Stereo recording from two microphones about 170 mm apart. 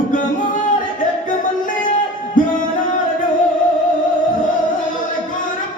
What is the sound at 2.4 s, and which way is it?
Music, 50° left (ahead or behind).